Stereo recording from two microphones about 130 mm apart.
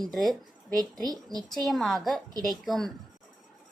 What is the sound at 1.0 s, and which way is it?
Speech, 30° right (ahead or behind).